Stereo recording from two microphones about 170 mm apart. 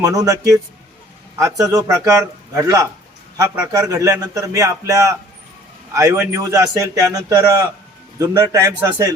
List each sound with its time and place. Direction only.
0.0 s a man's voice: 20° right (ahead or behind)